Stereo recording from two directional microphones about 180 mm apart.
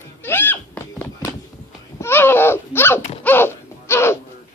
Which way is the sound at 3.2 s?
10° left (ahead or behind).